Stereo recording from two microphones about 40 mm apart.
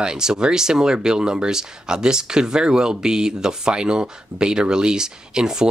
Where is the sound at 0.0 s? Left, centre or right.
Centre.